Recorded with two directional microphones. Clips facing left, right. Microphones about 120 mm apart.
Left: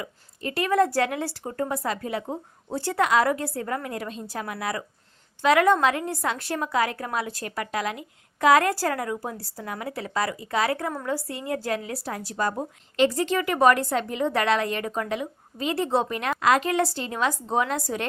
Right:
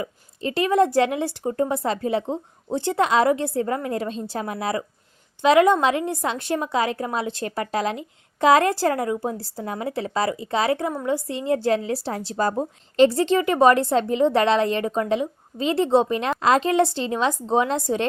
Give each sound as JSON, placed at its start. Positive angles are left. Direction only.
{"t": 0.0, "sound": "a woman's voice", "side_deg": -25}